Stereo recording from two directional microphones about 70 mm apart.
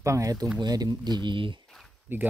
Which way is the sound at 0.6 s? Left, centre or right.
Right.